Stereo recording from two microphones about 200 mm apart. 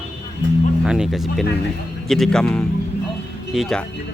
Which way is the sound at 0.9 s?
5° right (ahead or behind).